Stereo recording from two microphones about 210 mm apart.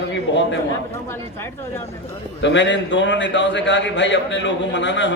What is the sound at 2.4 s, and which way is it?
A man's voice, 60° left (ahead or behind).